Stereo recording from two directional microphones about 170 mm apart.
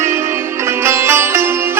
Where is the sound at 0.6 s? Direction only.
15° right (ahead or behind).